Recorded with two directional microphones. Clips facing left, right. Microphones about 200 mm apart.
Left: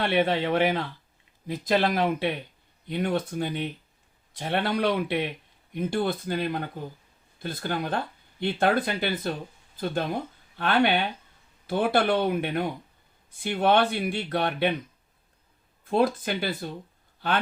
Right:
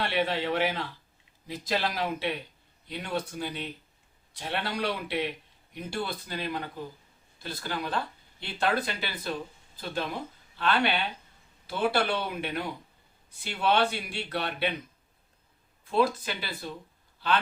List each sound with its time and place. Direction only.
0.0 s speech: 55° left (ahead or behind)
15.8 s a man's voice: 50° left (ahead or behind)